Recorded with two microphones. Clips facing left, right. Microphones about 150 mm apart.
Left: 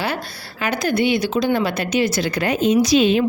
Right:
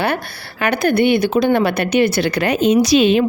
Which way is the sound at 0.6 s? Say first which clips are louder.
Right 4 dB; 60° right (ahead or behind).